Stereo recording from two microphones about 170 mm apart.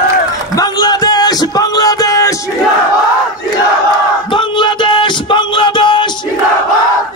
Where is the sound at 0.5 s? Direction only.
25° left (ahead or behind).